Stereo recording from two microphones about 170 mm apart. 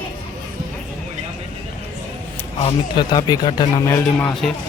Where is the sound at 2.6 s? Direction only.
25° left (ahead or behind).